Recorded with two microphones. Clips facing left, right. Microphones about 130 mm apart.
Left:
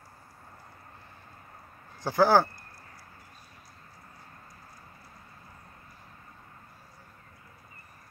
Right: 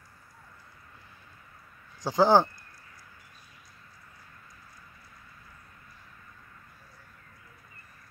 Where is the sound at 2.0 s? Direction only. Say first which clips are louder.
Right 1 dB; 15° right (ahead or behind).